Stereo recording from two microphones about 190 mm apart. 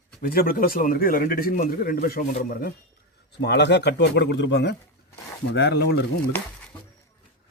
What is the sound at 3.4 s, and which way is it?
Speech, 60° left (ahead or behind).